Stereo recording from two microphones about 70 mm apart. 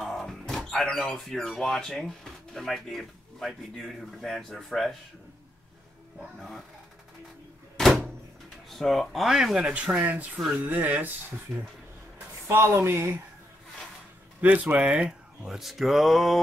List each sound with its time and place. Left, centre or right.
0.0 s speech: centre
6.1 s speech: centre
7.7 s door: centre
8.6 s speech: centre; by 11.3 s right
12.5 s speech: right
14.4 s speech: right; by 16.3 s centre